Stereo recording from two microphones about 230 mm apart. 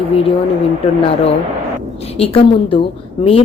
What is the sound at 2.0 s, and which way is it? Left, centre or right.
Speech, left.